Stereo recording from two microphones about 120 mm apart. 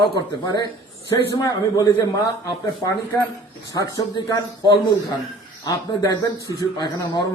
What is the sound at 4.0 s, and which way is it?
A man's voice, 40° left (ahead or behind).